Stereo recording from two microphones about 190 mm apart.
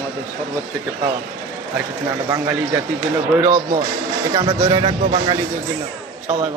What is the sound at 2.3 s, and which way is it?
Speech, 10° right (ahead or behind).